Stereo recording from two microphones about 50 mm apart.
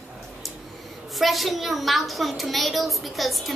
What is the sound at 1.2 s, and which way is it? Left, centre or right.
A woman's voice, centre.